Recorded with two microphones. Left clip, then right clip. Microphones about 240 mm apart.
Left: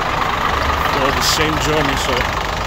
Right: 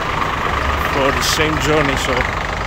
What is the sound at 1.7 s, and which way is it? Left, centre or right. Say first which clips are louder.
Vehicle: right 1 dB; left.